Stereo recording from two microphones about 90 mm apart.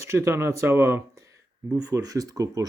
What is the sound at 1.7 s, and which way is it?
Speech, 40° right (ahead or behind).